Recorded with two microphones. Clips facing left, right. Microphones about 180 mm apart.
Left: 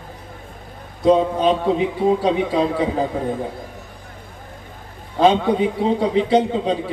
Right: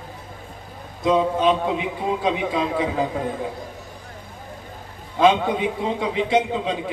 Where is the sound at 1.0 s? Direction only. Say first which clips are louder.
Left 3 dB; 35° left (ahead or behind).